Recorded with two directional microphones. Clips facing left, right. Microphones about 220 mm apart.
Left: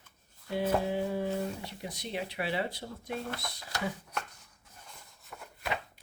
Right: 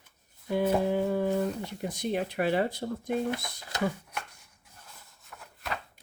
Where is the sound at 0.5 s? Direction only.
50° right (ahead or behind).